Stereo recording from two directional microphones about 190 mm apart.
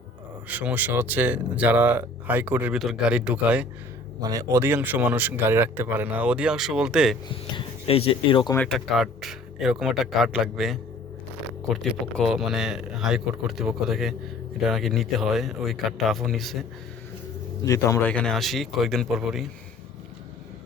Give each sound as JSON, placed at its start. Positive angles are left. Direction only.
{"t": 0.4, "sound": "speech", "side_deg": -10}
{"t": 4.2, "sound": "speech", "side_deg": -20}
{"t": 7.3, "sound": "speech", "side_deg": 30}
{"t": 8.5, "sound": "speech", "side_deg": 5}
{"t": 17.7, "sound": "speech", "side_deg": 15}